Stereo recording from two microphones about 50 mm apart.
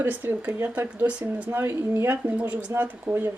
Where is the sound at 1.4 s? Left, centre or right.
Right.